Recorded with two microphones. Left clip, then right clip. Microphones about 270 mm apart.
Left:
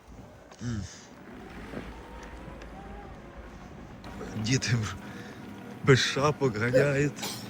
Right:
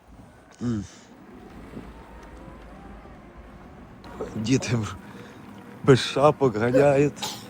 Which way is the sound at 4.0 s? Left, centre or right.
Centre.